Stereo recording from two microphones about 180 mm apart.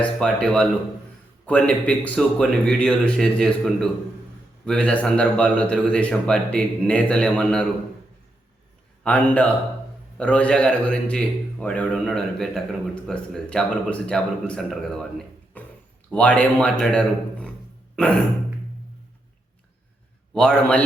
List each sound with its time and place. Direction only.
0.0 s a man's voice: 5° left (ahead or behind)
9.0 s a man's voice: 10° left (ahead or behind)
15.6 s a sound: 10° left (ahead or behind)
16.1 s a man's voice: 5° left (ahead or behind)
17.9 s a sound: 5° left (ahead or behind)
20.3 s a man's voice: 5° left (ahead or behind)